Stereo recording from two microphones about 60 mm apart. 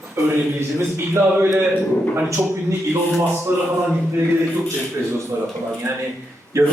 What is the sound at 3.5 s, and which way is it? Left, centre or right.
Speech, right.